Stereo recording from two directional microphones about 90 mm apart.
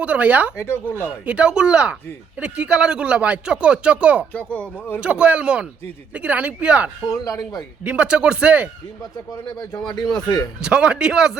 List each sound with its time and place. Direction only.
0.0 s speech: 15° right (ahead or behind)
0.5 s speech: 30° left (ahead or behind)
1.2 s speech: 15° right (ahead or behind)
4.3 s speech: 15° left (ahead or behind)
4.9 s speech: 10° right (ahead or behind)
7.1 s speech: 40° left (ahead or behind)
7.9 s speech: 10° right (ahead or behind)
9.6 s speech: 50° left (ahead or behind)
10.6 s speech: 10° right (ahead or behind)